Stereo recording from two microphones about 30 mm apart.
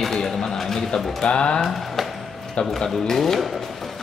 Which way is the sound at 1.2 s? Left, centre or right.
Left.